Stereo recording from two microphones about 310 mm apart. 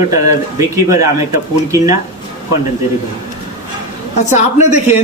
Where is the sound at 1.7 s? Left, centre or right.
Centre.